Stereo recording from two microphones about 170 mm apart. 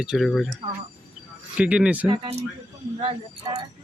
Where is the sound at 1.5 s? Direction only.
5° right (ahead or behind).